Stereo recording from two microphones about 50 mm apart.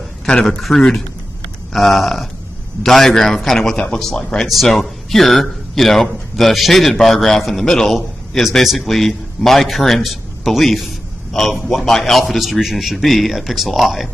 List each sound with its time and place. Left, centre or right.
0.3 s speech: centre
0.6 s a man's voice: centre
3.7 s speech: centre
4.0 s a man's voice: centre